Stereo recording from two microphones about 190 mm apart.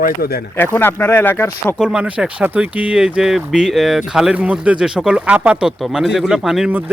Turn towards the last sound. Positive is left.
turn(degrees=-5)  # may be behind; listen again after turning